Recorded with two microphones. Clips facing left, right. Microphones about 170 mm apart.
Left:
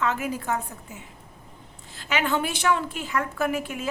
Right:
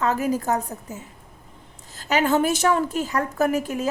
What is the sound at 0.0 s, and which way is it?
A woman's voice, 40° right (ahead or behind).